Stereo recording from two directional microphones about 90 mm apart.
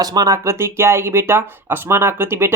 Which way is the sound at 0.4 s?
30° right (ahead or behind).